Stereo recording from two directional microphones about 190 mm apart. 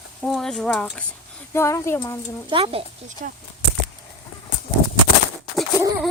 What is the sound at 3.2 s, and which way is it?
Speech, 40° right (ahead or behind).